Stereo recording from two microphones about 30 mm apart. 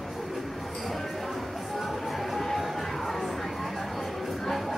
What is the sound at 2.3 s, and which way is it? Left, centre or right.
Music, centre.